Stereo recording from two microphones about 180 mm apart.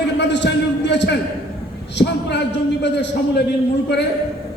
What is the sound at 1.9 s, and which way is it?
A man's voice, 75° left (ahead or behind).